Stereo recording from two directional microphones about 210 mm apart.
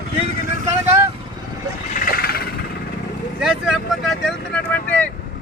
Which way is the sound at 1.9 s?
40° left (ahead or behind).